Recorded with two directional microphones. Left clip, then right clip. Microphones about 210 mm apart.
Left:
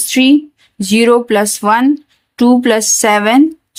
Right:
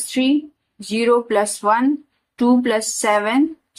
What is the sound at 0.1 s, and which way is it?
Speech, 55° left (ahead or behind).